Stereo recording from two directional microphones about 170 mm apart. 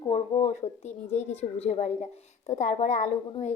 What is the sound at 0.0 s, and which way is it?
A woman's voice, 40° left (ahead or behind).